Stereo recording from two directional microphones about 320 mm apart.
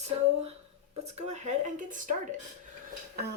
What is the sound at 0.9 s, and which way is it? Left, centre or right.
Speech, centre.